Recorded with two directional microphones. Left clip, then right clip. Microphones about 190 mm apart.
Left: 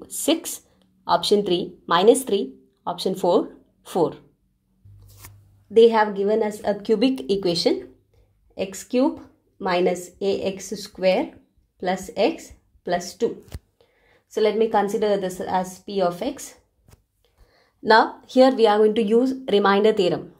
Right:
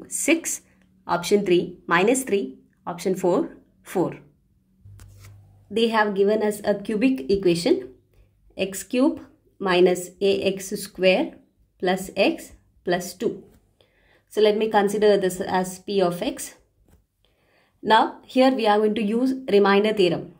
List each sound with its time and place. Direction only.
1.0 s a woman's voice: 10° left (ahead or behind)
5.7 s a woman's voice: 25° left (ahead or behind)
13.7 s a woman's voice: 30° left (ahead or behind)
17.8 s speech: 40° left (ahead or behind)